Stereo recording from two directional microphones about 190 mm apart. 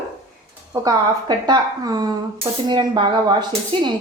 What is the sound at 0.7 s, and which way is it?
Speech, 20° right (ahead or behind).